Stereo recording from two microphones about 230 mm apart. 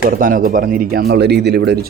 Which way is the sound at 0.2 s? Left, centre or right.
Right.